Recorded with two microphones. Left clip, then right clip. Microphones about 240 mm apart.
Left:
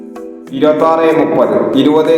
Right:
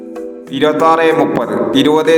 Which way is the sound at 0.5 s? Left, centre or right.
Right.